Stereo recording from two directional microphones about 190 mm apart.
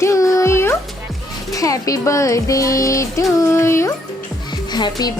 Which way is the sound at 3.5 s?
15° left (ahead or behind).